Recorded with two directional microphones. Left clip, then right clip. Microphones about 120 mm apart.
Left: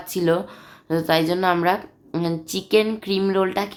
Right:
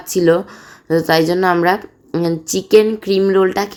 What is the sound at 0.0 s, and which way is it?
A woman's voice, 30° right (ahead or behind).